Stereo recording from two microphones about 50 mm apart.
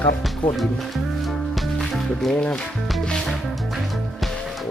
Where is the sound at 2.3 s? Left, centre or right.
Left.